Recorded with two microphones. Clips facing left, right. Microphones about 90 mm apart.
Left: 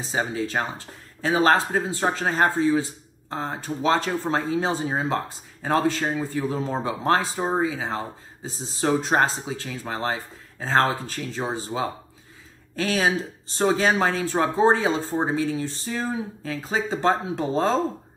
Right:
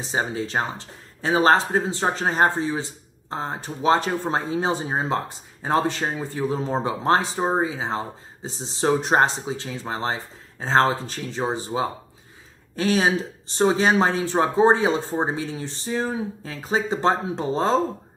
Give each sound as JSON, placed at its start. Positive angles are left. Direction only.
{"t": 0.0, "sound": "speech", "side_deg": -30}